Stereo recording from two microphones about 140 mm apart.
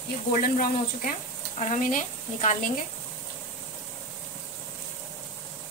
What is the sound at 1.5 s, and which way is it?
A woman's voice, 55° left (ahead or behind).